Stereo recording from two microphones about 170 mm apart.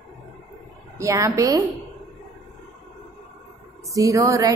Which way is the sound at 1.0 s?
20° right (ahead or behind).